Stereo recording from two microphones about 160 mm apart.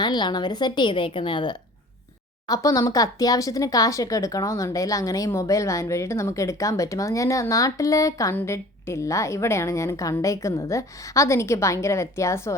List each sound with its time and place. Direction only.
0.0 s speech: 30° left (ahead or behind)